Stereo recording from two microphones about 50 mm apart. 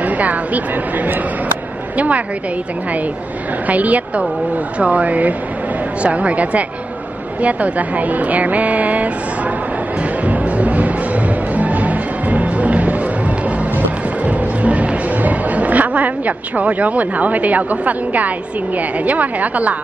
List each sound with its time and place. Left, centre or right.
0.0 s speech: right
3.6 s speech: right
10.2 s music: right
18.8 s speech: right